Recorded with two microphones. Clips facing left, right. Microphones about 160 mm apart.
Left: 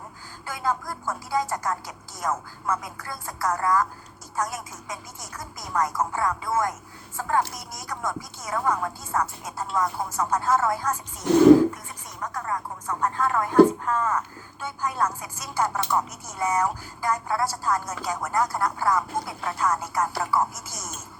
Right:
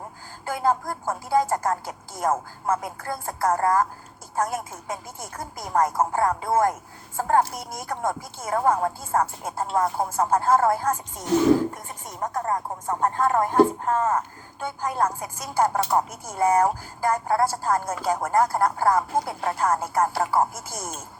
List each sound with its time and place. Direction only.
0.4 s a woman's voice: 50° right (ahead or behind)
12.2 s a woman's voice: 45° right (ahead or behind)